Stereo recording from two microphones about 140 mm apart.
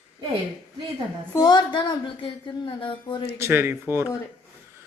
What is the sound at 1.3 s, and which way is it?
Speech, 30° left (ahead or behind).